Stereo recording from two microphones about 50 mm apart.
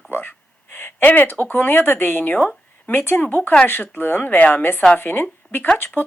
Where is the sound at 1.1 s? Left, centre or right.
Left.